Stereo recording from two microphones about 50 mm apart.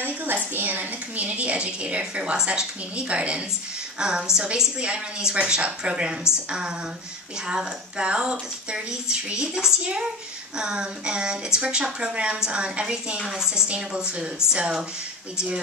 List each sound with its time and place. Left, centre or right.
0.0 s a woman's voice: right
7.4 s a woman's voice: centre
13.3 s a woman's voice: centre